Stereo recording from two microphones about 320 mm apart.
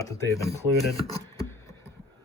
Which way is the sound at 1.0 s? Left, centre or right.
Centre.